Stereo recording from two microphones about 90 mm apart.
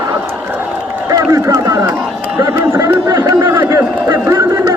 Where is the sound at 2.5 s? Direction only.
35° right (ahead or behind).